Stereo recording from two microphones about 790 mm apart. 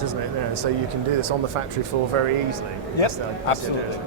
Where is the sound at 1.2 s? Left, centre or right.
Right.